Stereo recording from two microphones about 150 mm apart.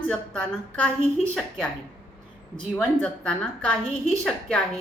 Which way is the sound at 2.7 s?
10° left (ahead or behind).